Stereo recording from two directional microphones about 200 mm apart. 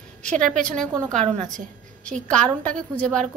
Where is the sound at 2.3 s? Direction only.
5° left (ahead or behind).